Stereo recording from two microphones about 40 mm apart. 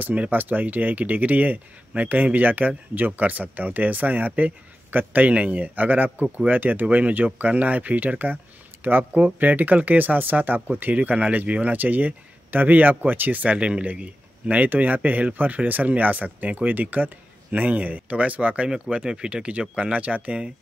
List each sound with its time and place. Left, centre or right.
0.3 s speech: right
5.3 s speech: right
14.7 s speech: right
19.0 s speech: right